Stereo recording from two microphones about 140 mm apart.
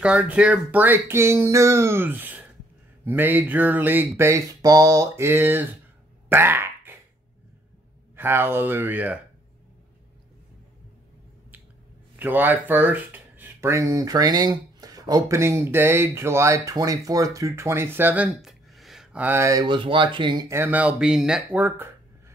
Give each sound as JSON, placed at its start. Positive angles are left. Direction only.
{"t": 0.0, "sound": "speech", "side_deg": -10}
{"t": 6.2, "sound": "a sound", "side_deg": -15}
{"t": 8.2, "sound": "speech", "side_deg": -15}
{"t": 12.2, "sound": "speech", "side_deg": -15}
{"t": 19.2, "sound": "speech", "side_deg": -20}
{"t": 19.6, "sound": "speech", "side_deg": -35}
{"t": 20.4, "sound": "speech", "side_deg": -15}